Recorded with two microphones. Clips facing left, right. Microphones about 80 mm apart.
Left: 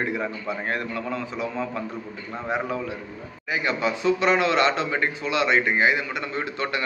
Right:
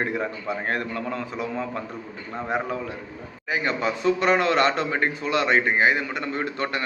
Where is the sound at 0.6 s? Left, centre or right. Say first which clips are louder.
Right 1 dB; right.